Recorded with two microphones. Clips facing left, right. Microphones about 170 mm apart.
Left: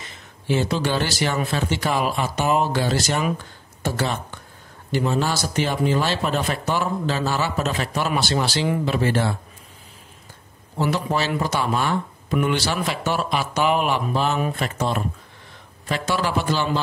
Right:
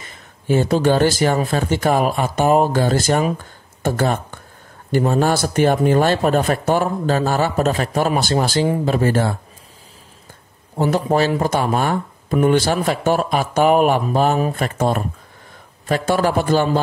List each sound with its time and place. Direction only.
0.5 s speech: 45° right (ahead or behind)
10.8 s speech: 45° right (ahead or behind)